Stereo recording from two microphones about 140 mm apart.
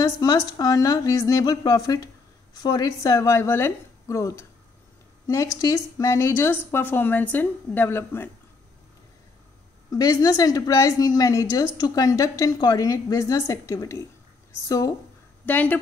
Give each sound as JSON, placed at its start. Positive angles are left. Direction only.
{"t": 0.0, "sound": "a woman's voice", "side_deg": 25}
{"t": 9.8, "sound": "a woman's voice", "side_deg": 25}
{"t": 15.4, "sound": "a woman's voice", "side_deg": 15}